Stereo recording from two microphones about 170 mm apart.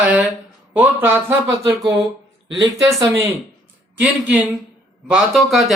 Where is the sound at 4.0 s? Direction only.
10° right (ahead or behind).